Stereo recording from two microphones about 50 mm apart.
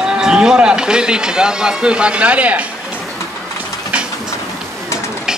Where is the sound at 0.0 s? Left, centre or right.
Centre.